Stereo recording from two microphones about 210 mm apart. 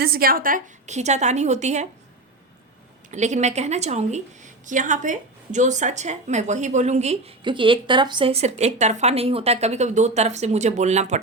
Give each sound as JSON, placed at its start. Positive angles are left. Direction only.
{"t": 0.0, "sound": "a woman's voice", "side_deg": -45}
{"t": 3.1, "sound": "a woman's voice", "side_deg": -35}